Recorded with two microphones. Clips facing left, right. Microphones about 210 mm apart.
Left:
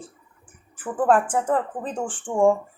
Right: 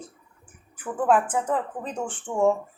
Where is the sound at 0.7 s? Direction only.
45° left (ahead or behind).